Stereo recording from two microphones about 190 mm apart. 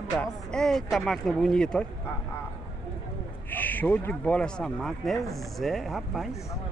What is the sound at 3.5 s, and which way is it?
Speech, 10° left (ahead or behind).